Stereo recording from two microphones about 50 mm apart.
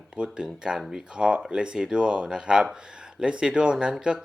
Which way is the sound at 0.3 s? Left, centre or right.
Centre.